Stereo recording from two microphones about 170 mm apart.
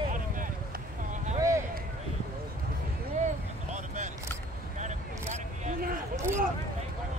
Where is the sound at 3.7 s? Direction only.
45° right (ahead or behind).